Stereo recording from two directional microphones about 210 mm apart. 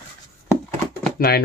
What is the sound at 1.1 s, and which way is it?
Speech, 45° left (ahead or behind).